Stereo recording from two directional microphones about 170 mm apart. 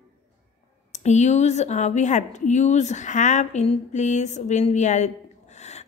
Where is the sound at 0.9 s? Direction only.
40° left (ahead or behind).